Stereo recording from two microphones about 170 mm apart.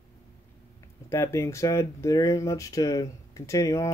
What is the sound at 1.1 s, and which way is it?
Speech, 15° left (ahead or behind).